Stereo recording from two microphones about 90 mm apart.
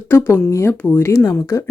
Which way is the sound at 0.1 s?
30° left (ahead or behind).